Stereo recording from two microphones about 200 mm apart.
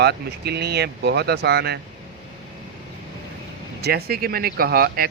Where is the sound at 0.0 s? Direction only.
55° right (ahead or behind).